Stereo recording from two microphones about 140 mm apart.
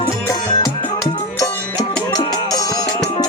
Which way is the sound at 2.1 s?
25° left (ahead or behind).